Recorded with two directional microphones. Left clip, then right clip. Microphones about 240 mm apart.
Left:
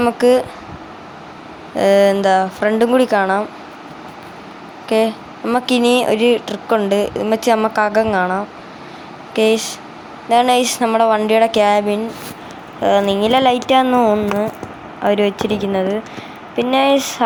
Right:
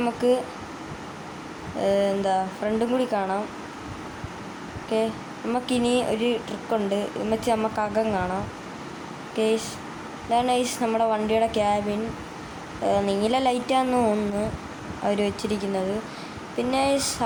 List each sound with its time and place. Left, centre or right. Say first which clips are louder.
0.0 s a woman's voice: left 10 dB; left
1.8 s a woman's voice: left 11 dB; left
4.9 s a woman's voice: left 10 dB; left